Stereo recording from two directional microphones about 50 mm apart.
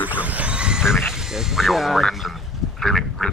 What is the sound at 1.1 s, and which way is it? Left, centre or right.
Speech, centre.